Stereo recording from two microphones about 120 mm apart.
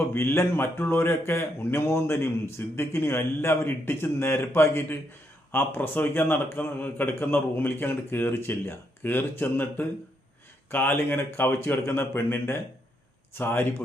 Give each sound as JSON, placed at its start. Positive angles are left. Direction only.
{"t": 0.1, "sound": "a man's voice", "side_deg": 20}